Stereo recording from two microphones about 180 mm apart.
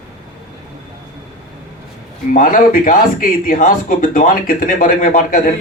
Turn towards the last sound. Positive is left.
turn(degrees=50)  # may be behind; listen again after turning